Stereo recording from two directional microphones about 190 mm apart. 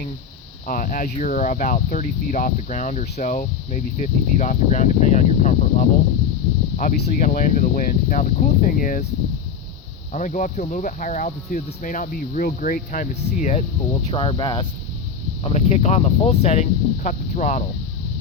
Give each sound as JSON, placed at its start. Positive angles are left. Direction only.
{"t": 0.7, "sound": "speech", "side_deg": 45}
{"t": 10.1, "sound": "speech", "side_deg": 40}
{"t": 14.1, "sound": "speech", "side_deg": 25}
{"t": 15.4, "sound": "speech", "side_deg": 35}